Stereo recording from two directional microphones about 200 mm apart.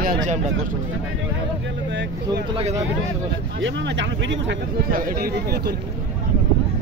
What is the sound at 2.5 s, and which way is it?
Speech, 35° right (ahead or behind).